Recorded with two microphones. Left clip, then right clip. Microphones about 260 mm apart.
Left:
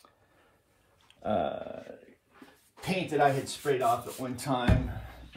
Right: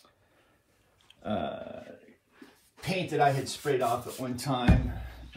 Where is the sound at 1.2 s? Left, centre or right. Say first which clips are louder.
Left 4 dB; centre.